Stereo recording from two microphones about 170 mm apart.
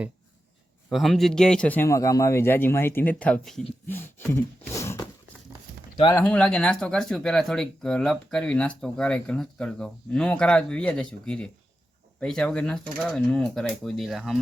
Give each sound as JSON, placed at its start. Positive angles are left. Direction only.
{"t": 0.9, "sound": "a man's voice", "side_deg": 0}
{"t": 4.3, "sound": "a sound", "side_deg": 15}
{"t": 6.1, "sound": "speech", "side_deg": 5}